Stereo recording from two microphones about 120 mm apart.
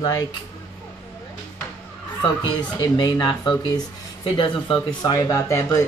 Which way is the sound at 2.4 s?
40° left (ahead or behind).